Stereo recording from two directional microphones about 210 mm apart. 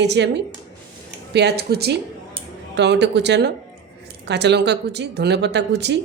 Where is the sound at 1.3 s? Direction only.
55° right (ahead or behind).